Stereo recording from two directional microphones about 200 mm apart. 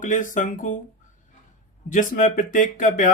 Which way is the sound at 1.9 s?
40° left (ahead or behind).